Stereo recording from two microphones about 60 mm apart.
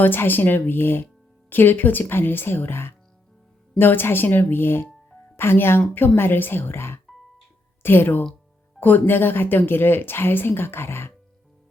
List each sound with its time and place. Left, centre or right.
0.0 s a woman's voice: left